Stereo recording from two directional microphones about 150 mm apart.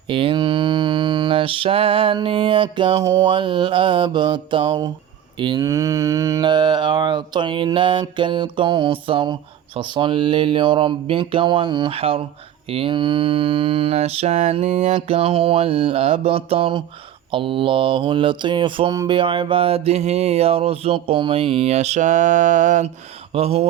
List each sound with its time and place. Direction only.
0.1 s mantra: 35° right (ahead or behind); by 22.9 s 55° right (ahead or behind)
23.3 s speech: 40° right (ahead or behind)